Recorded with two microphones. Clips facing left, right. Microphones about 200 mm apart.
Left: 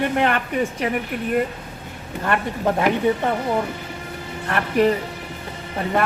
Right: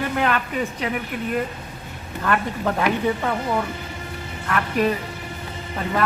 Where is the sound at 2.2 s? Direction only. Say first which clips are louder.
Left 1 dB; 25° left (ahead or behind).